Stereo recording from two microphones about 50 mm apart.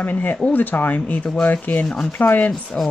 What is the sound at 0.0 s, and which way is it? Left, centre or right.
Speech, left.